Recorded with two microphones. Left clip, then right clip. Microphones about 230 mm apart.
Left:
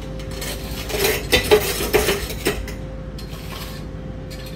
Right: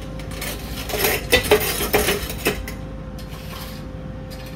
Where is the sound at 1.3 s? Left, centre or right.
Centre.